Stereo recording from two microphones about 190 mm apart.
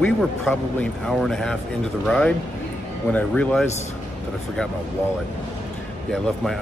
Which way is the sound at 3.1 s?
5° left (ahead or behind).